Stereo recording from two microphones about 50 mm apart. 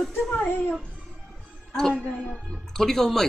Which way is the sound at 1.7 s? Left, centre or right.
Centre.